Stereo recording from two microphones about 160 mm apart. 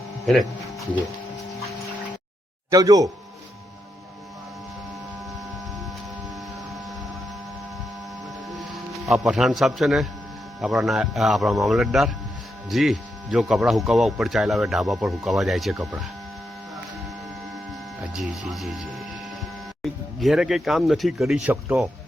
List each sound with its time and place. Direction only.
0.3 s speech: 5° left (ahead or behind)
2.6 s speech: 20° right (ahead or behind)
8.4 s a man's voice: centre (ahead or behind)
18.1 s speech: centre (ahead or behind)